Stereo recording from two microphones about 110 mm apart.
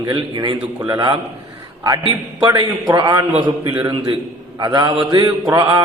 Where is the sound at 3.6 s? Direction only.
45° right (ahead or behind).